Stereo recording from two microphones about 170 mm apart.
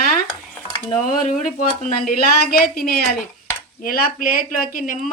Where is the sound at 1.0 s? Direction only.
50° left (ahead or behind).